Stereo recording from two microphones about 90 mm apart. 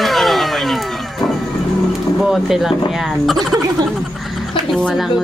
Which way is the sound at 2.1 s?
Centre (ahead or behind).